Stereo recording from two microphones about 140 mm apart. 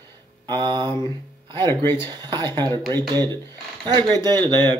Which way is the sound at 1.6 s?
20° left (ahead or behind).